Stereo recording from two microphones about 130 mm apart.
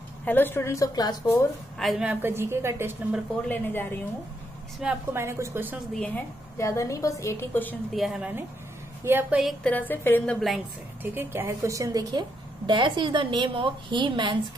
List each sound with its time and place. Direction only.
0.2 s a woman's voice: 15° left (ahead or behind)
1.8 s a woman's voice: centre (ahead or behind)
2.0 s a woman's voice: 15° right (ahead or behind)
3.4 s a woman's voice: 15° left (ahead or behind)
4.8 s a woman's voice: 5° right (ahead or behind)
5.1 s speech: 20° right (ahead or behind)
5.9 s a woman's voice: 10° left (ahead or behind)
6.6 s a woman's voice: 25° left (ahead or behind)
7.9 s a woman's voice: 5° right (ahead or behind)
9.0 s a woman's voice: 15° right (ahead or behind)
9.4 s a woman's voice: centre (ahead or behind)
9.7 s a woman's voice: 15° left (ahead or behind)
11.0 s a woman's voice: 15° right (ahead or behind); by 14.6 s 35° right (ahead or behind)